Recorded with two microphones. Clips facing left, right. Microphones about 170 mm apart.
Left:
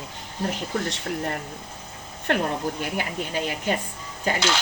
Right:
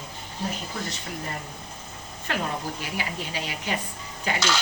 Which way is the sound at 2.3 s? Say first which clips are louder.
Left 5 dB; 60° left (ahead or behind).